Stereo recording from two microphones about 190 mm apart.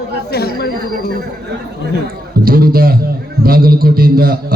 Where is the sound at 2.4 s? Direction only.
50° right (ahead or behind).